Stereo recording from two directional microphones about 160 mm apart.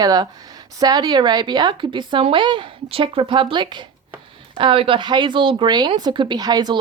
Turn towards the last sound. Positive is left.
turn(degrees=-25)  # may be behind; listen again after turning